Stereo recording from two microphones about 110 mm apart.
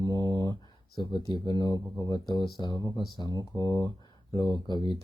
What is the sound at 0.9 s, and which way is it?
Speech, 45° left (ahead or behind).